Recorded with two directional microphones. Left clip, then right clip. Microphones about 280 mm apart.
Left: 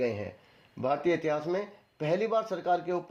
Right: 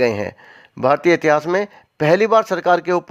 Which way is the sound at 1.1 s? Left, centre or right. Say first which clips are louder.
Right 14 dB; right.